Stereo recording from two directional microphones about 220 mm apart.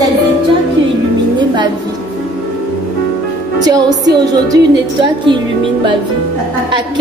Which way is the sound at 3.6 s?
20° right (ahead or behind).